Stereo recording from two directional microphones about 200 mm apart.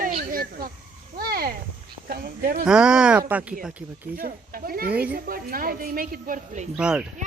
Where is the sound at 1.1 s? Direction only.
50° right (ahead or behind).